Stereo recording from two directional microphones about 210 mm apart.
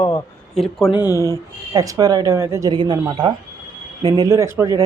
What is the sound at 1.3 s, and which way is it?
Speech, 15° right (ahead or behind).